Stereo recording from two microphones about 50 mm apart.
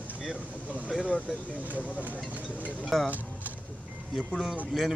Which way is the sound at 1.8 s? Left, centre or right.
Left.